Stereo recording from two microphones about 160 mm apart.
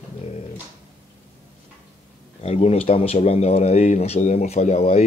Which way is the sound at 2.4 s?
40° left (ahead or behind).